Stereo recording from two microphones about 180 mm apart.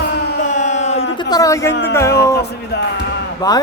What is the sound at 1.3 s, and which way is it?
Speech, 20° left (ahead or behind).